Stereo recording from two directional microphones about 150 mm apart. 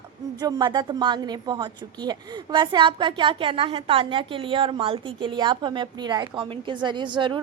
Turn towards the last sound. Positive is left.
turn(degrees=-30)  # may be behind; listen again after turning